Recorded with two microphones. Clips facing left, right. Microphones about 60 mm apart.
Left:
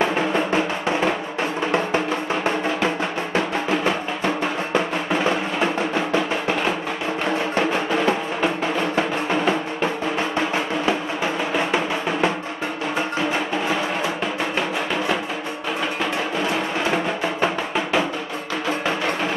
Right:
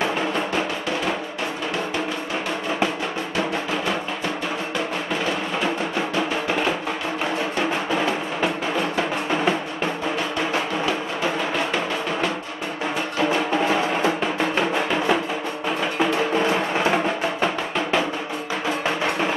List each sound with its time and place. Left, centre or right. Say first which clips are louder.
0.0 s music: left 3 dB; left
4.7 s music: left 6 dB; left
11.5 s music: left 2 dB; centre
17.4 s music: left 1 dB; centre